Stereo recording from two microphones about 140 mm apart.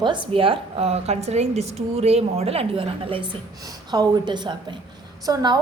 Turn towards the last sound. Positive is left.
turn(degrees=-25)  # may be behind; listen again after turning